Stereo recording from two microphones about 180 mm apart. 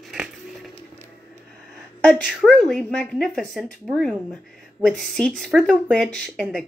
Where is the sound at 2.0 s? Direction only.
Centre (ahead or behind).